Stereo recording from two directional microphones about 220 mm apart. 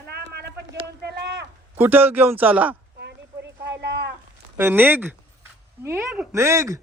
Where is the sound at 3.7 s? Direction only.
50° right (ahead or behind).